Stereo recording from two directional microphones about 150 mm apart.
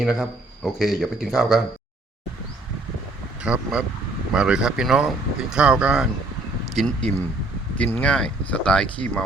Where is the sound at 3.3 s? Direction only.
10° right (ahead or behind).